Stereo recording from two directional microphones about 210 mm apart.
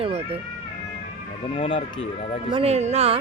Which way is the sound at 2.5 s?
30° right (ahead or behind).